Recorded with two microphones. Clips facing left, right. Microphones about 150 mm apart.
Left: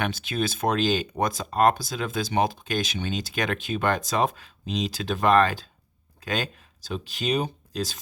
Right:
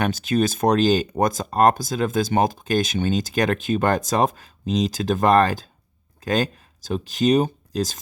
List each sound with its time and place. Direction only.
0.0 s speech: 40° right (ahead or behind)